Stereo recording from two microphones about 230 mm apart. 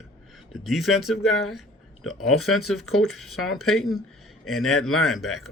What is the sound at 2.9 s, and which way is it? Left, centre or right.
A man's voice, centre.